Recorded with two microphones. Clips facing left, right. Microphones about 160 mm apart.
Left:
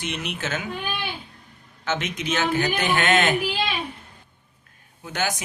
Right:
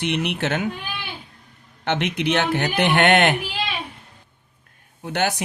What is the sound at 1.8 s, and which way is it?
A man's voice, 65° right (ahead or behind).